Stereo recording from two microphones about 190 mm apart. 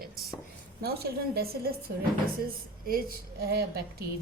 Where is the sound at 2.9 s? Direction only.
50° right (ahead or behind).